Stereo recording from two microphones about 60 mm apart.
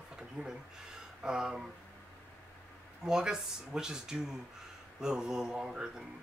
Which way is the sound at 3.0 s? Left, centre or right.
Centre.